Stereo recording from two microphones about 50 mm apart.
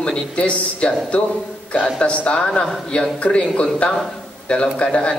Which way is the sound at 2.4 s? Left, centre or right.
Centre.